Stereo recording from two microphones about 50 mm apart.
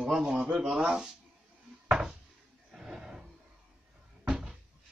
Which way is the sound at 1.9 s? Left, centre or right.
Centre.